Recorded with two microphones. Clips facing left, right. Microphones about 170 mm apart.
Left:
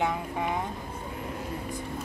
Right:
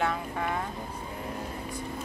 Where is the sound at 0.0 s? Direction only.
15° left (ahead or behind).